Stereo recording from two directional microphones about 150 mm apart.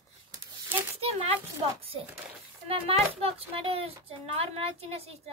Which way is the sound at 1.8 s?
35° right (ahead or behind).